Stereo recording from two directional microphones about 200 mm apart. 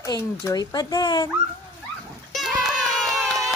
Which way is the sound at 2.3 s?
Centre (ahead or behind).